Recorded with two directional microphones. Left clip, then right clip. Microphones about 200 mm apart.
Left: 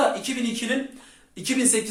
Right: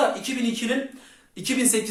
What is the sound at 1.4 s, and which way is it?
Speech, 5° right (ahead or behind).